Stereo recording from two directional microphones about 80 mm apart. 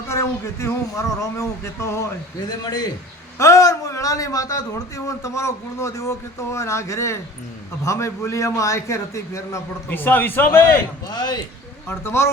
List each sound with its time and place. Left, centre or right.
0.1 s a man's voice: left
2.5 s a man's voice: left
3.3 s a man's voice: left
9.9 s a man's voice: left
11.1 s a man's voice: left
11.9 s a man's voice: left